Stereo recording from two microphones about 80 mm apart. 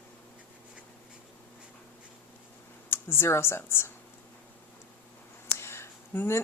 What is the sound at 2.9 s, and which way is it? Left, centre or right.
A woman's voice, left.